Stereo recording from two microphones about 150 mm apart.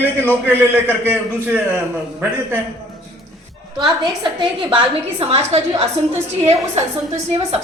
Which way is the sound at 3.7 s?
30° right (ahead or behind).